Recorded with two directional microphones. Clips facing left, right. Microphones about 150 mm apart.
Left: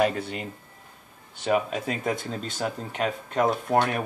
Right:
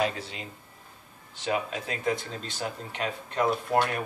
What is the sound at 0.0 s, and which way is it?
Speech, 55° left (ahead or behind).